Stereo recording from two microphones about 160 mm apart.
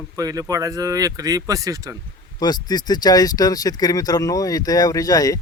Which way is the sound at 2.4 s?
25° left (ahead or behind).